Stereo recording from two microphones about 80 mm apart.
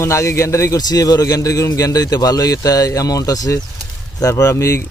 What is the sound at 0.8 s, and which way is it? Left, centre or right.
A man's voice, left.